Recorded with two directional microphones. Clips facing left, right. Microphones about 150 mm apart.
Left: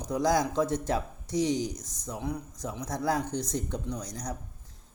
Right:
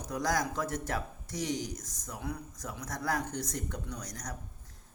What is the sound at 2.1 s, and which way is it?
Speech, 20° left (ahead or behind).